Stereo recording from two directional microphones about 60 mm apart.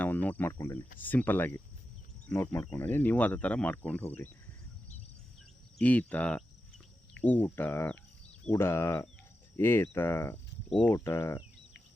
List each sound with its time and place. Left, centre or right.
0.0 s cricket: left
0.8 s speech: left
4.0 s speech: left
5.8 s speech: left
10.9 s speech: left